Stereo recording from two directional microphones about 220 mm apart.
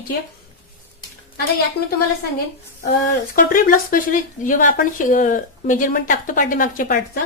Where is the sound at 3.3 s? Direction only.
40° left (ahead or behind).